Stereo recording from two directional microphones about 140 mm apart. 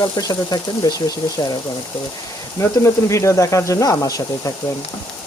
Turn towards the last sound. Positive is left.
turn(degrees=25)  # may be behind; listen again after turning